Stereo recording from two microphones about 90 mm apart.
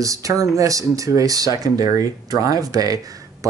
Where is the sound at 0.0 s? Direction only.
40° right (ahead or behind).